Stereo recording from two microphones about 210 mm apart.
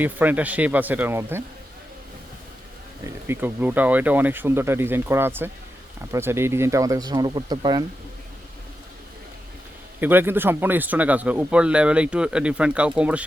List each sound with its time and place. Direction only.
0.0 s speech: 10° right (ahead or behind)
3.2 s speech: 10° right (ahead or behind)
10.0 s speech: 10° right (ahead or behind)